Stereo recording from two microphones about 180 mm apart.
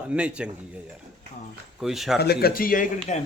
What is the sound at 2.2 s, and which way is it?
Speech, 60° left (ahead or behind).